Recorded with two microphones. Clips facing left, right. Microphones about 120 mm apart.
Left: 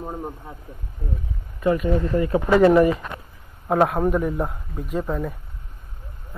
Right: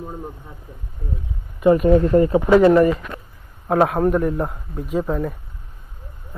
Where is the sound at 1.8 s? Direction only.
50° right (ahead or behind).